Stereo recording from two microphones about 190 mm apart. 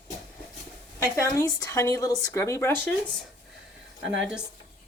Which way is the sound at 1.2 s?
15° left (ahead or behind).